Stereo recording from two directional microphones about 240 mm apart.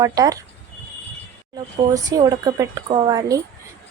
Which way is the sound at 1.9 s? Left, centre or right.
Centre.